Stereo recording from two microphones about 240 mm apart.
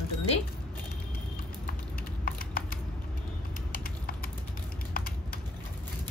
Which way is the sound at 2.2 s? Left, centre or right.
Left.